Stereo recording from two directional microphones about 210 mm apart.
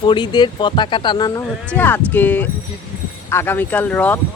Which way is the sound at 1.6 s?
10° left (ahead or behind).